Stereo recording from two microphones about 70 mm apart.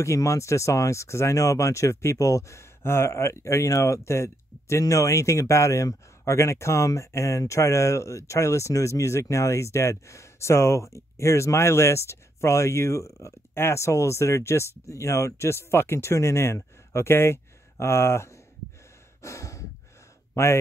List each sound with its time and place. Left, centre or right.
0.0 s speech: left
19.2 s sigh: left